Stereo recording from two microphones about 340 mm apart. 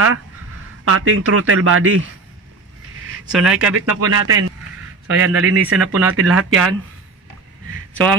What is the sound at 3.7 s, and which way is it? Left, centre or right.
Speech, right.